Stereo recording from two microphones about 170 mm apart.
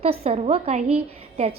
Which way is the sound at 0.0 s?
35° right (ahead or behind).